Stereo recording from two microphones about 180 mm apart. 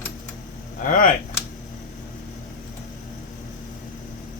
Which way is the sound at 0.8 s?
45° left (ahead or behind).